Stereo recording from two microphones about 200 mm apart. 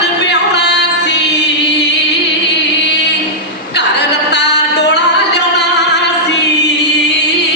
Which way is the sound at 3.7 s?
60° left (ahead or behind).